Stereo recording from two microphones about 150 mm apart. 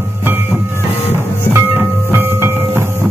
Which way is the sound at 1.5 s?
15° right (ahead or behind).